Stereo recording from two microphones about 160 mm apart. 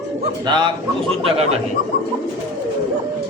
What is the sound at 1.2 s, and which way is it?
Speech, 40° right (ahead or behind).